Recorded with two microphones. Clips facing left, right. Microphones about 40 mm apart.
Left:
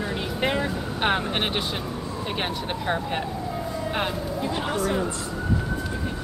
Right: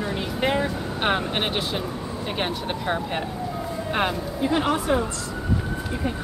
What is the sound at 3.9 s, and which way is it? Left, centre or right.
Speech, centre.